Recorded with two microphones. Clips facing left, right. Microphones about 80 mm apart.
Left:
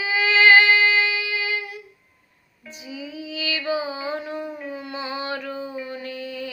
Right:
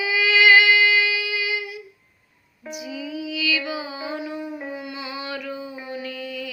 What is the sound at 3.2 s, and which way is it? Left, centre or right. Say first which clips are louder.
Music: right 2 dB; left.